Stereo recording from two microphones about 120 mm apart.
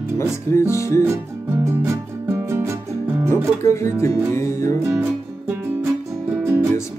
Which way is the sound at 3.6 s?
25° left (ahead or behind).